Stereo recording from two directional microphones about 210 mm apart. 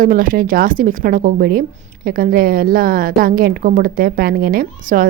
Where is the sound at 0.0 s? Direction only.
40° right (ahead or behind).